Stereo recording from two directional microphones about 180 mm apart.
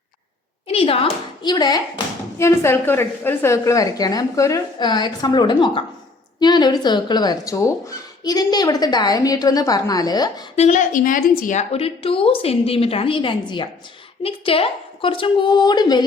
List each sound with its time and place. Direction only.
0.7 s speech: 30° left (ahead or behind)
10.5 s a woman's voice: 40° left (ahead or behind); by 16.0 s 25° left (ahead or behind)